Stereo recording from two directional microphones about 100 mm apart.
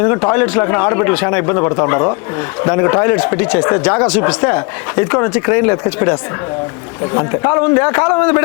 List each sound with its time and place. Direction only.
0.0 s a man's voice: 15° left (ahead or behind)